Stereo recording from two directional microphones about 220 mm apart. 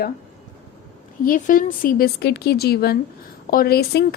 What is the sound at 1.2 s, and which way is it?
A woman's voice, 40° left (ahead or behind).